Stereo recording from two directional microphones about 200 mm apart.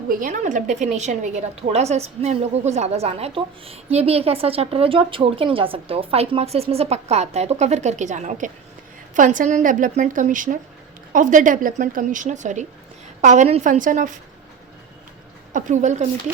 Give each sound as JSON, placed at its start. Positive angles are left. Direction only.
{"t": 0.1, "sound": "a woman's voice", "side_deg": -40}
{"t": 15.5, "sound": "a woman's voice", "side_deg": -40}